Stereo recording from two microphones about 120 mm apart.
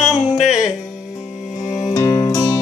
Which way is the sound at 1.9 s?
30° left (ahead or behind).